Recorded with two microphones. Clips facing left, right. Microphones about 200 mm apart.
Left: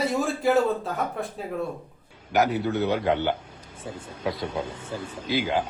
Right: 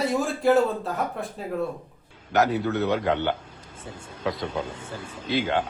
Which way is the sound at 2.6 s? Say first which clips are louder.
Even; 20° left (ahead or behind).